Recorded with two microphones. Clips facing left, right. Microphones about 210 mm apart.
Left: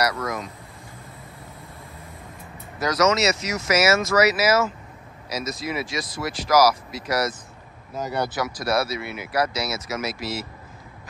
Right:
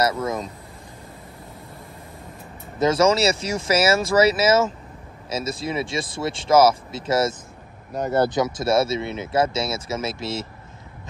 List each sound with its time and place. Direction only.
0.0 s speech: 25° right (ahead or behind)
2.8 s speech: 30° right (ahead or behind)
8.4 s speech: 25° right (ahead or behind)